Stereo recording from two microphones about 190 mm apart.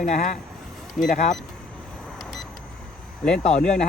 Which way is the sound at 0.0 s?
40° left (ahead or behind).